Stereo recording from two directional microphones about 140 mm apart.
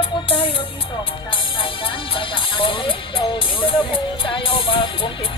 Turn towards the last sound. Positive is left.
turn(degrees=40)  # may be behind; listen again after turning